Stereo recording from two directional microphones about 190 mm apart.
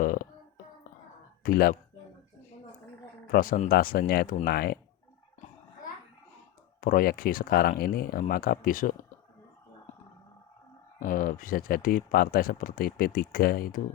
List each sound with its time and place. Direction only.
0.0 s a sound: 45° left (ahead or behind)
1.5 s speech: 50° left (ahead or behind)
3.3 s speech: 50° left (ahead or behind)
6.8 s speech: 50° left (ahead or behind)
11.0 s speech: 45° left (ahead or behind)